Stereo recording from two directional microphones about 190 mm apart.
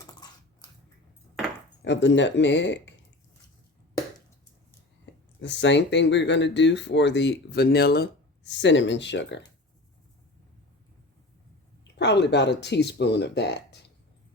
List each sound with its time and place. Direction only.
1.8 s speech: 70° left (ahead or behind)
5.4 s speech: 70° left (ahead or behind)
11.9 s speech: 65° left (ahead or behind)